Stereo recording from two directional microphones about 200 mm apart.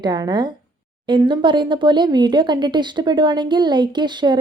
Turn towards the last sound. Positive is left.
turn(degrees=-20)  # may be behind; listen again after turning